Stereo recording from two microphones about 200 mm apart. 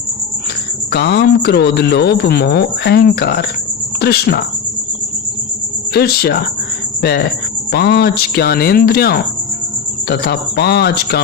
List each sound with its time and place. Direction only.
0.9 s speech: 55° left (ahead or behind)
5.9 s speech: 50° left (ahead or behind)